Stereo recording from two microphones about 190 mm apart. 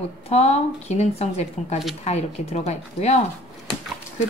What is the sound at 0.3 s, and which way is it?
A woman's voice, 35° left (ahead or behind).